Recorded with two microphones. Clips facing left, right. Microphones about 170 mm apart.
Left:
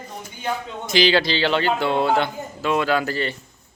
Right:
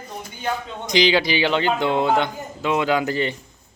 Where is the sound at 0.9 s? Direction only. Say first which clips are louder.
Even; 15° right (ahead or behind).